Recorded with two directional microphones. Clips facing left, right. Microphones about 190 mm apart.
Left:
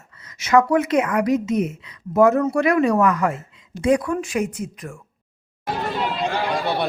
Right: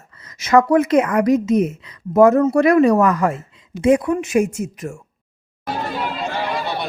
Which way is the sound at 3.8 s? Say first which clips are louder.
Right 4 dB; 25° right (ahead or behind).